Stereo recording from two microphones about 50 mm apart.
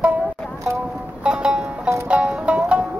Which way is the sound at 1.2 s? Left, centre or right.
Centre.